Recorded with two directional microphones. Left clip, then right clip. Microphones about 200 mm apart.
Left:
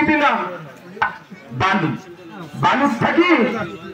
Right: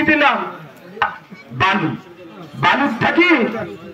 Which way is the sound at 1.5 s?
25° left (ahead or behind).